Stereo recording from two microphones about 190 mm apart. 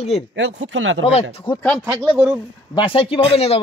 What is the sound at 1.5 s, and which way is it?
Speech, 25° left (ahead or behind).